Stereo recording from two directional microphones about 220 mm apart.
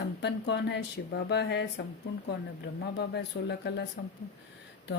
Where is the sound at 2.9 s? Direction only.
50° left (ahead or behind).